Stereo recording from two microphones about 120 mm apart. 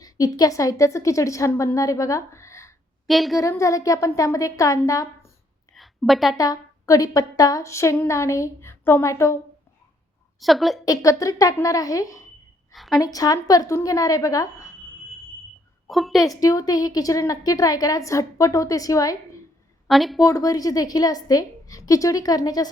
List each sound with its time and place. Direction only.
0.0 s a woman's voice: 30° left (ahead or behind)
3.1 s a woman's voice: centre (ahead or behind)
3.4 s a woman's voice: 25° left (ahead or behind)
5.7 s a sound: centre (ahead or behind)
6.3 s a woman's voice: 30° left (ahead or behind)
10.4 s a woman's voice: centre (ahead or behind)
10.8 s a woman's voice: 30° left (ahead or behind)
12.7 s a woman's voice: centre (ahead or behind)
13.0 s a woman's voice: 30° left (ahead or behind)
15.9 s a woman's voice: centre (ahead or behind)
16.2 s a woman's voice: 30° left (ahead or behind)
19.9 s a woman's voice: centre (ahead or behind)
20.2 s a woman's voice: 30° left (ahead or behind)